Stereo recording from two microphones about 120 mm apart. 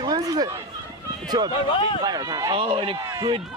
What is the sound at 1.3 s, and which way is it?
Speech, 35° right (ahead or behind).